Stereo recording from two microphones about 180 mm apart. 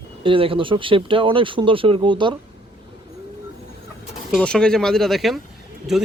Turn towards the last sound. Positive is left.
turn(degrees=0)  # may be behind; listen again after turning